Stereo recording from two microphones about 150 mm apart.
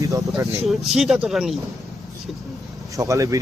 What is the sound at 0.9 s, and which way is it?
Speech, 5° right (ahead or behind).